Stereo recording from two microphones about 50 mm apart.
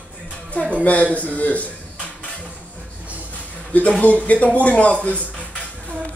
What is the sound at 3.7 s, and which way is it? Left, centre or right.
Speech, left.